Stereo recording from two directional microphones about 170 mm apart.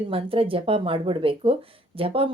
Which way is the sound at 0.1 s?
35° right (ahead or behind).